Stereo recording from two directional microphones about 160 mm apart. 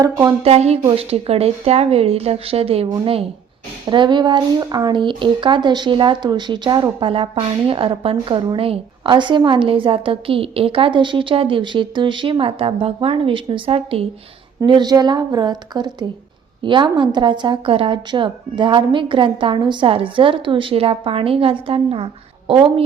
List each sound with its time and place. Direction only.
0.0 s a woman's voice: 20° right (ahead or behind)
0.4 s speech: 40° right (ahead or behind)
14.6 s a woman's voice: 25° right (ahead or behind)